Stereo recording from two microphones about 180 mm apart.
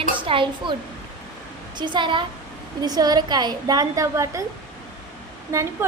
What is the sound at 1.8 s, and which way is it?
A woman's voice, 25° right (ahead or behind).